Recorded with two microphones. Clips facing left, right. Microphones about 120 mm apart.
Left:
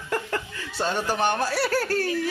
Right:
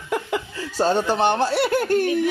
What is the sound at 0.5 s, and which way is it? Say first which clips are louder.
Speech: right 9 dB; 35° right (ahead or behind).